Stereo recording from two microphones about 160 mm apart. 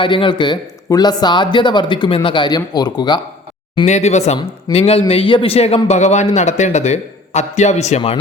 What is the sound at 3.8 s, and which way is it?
A man's voice, 45° left (ahead or behind).